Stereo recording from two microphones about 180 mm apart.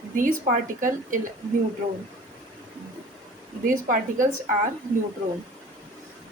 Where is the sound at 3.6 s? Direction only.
45° right (ahead or behind).